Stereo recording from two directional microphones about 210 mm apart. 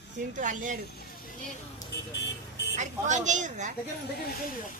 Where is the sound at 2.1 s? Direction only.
55° left (ahead or behind).